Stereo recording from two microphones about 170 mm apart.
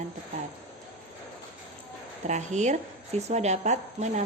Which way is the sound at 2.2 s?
45° right (ahead or behind).